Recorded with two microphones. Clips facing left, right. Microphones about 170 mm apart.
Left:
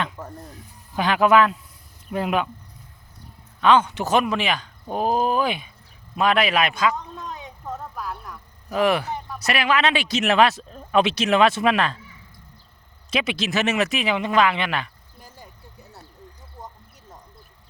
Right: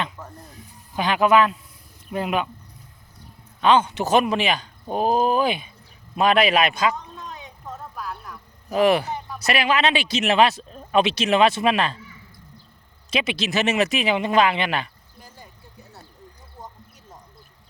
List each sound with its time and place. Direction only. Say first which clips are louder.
0.9 s a man's voice: left 1 dB; 15° right (ahead or behind)
3.6 s speech: even; 25° right (ahead or behind)
8.7 s speech: right 2 dB; 30° right (ahead or behind)
13.1 s speech: even; 25° right (ahead or behind)